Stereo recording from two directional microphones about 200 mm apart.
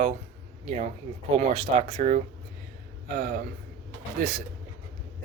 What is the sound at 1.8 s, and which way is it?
Speech, 40° right (ahead or behind).